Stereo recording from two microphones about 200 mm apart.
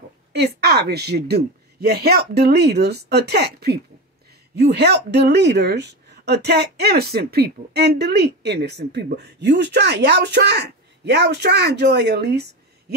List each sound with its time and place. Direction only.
0.3 s speech: 55° right (ahead or behind)